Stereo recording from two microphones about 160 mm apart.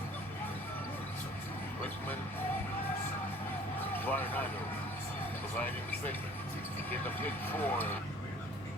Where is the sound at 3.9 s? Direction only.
10° left (ahead or behind).